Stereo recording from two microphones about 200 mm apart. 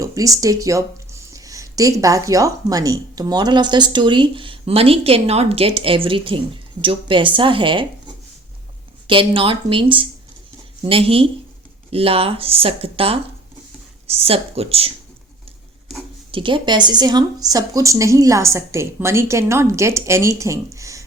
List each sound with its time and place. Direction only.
0.0 s speech: 15° right (ahead or behind)
9.0 s speech: 25° right (ahead or behind)
16.3 s speech: 25° right (ahead or behind)